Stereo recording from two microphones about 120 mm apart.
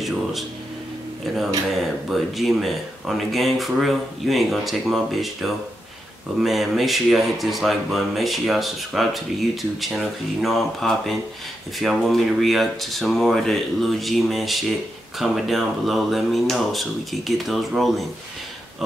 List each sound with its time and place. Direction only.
0.0 s speech: centre (ahead or behind)
1.7 s speech: centre (ahead or behind)